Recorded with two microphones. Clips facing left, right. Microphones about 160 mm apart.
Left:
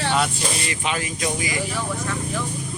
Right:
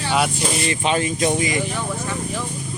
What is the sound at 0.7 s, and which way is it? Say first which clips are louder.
Speech: right 6 dB; 30° right (ahead or behind).